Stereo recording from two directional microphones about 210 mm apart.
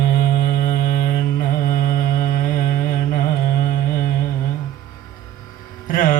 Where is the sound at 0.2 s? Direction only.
40° left (ahead or behind).